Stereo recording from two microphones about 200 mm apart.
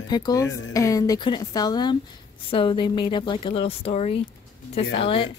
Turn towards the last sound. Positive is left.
turn(degrees=30)  # may be behind; listen again after turning